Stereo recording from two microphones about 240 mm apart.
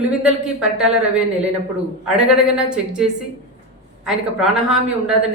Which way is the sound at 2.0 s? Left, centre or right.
Centre.